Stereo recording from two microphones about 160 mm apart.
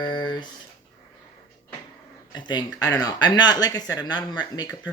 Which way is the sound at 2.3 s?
25° left (ahead or behind).